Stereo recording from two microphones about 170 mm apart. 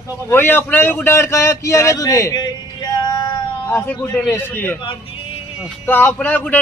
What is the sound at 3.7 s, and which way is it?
A man's voice, 15° left (ahead or behind).